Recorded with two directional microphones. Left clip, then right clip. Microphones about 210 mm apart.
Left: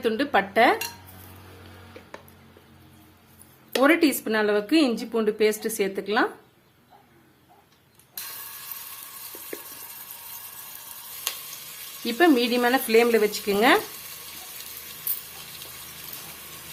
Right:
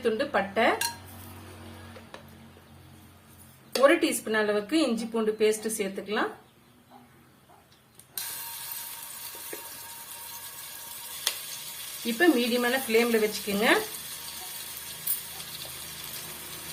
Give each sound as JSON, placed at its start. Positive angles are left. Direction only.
{"t": 0.0, "sound": "a woman's voice", "side_deg": 50}
{"t": 3.8, "sound": "a woman's voice", "side_deg": 50}
{"t": 12.1, "sound": "a woman's voice", "side_deg": 55}